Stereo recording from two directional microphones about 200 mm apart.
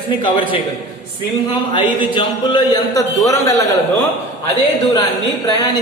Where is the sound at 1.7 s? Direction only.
25° left (ahead or behind).